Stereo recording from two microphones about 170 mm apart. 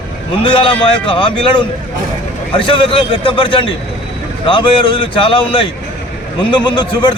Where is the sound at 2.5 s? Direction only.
30° left (ahead or behind).